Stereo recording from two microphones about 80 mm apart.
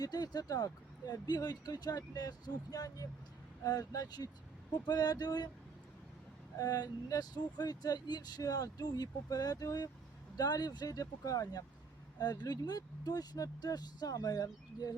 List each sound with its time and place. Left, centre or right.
0.0 s speech: left
6.6 s speech: left